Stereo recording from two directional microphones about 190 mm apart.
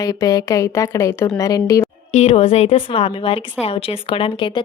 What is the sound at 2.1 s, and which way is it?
Speech, 35° left (ahead or behind).